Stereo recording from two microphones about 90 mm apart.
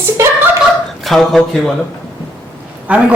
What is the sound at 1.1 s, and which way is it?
Speech, centre (ahead or behind).